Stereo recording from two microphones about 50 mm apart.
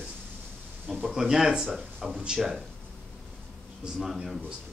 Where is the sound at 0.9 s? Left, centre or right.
Centre.